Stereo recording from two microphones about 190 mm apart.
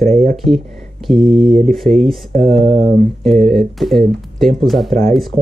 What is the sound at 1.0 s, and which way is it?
Speech, centre (ahead or behind).